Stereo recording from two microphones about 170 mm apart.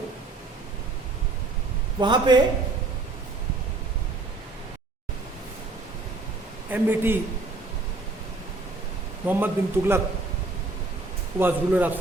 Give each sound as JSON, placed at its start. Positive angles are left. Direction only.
{"t": 2.0, "sound": "a man's voice", "side_deg": -25}
{"t": 6.7, "sound": "speech", "side_deg": -10}
{"t": 9.2, "sound": "speech", "side_deg": -10}
{"t": 11.3, "sound": "speech", "side_deg": -10}